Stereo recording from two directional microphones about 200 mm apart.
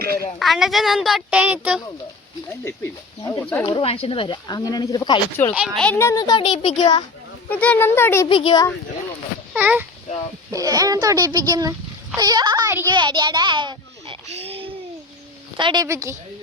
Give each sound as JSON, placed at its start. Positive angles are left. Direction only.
{"t": 0.3, "sound": "speech", "side_deg": 0}
{"t": 2.6, "sound": "a child's voice", "side_deg": 10}
{"t": 3.7, "sound": "speech", "side_deg": 25}
{"t": 5.5, "sound": "speech", "side_deg": 0}
{"t": 7.5, "sound": "a child's voice", "side_deg": 5}
{"t": 8.3, "sound": "speech", "side_deg": 25}
{"t": 9.5, "sound": "a child's voice", "side_deg": -10}